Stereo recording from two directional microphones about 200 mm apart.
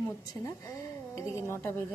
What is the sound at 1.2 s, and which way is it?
Speech, 15° left (ahead or behind).